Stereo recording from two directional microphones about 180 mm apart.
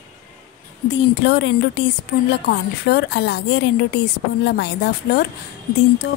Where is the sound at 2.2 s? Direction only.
65° left (ahead or behind).